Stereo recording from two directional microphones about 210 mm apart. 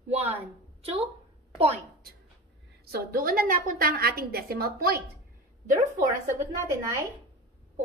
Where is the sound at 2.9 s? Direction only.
45° right (ahead or behind).